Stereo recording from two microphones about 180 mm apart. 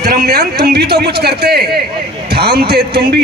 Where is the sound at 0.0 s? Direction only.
65° right (ahead or behind).